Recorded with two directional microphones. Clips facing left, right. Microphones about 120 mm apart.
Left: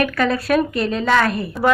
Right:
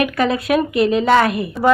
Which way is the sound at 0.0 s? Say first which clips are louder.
Right 1 dB; 25° right (ahead or behind).